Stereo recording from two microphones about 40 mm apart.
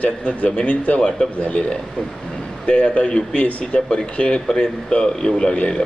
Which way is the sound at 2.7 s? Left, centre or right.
Left.